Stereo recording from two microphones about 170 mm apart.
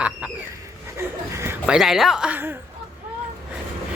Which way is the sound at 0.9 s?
15° right (ahead or behind).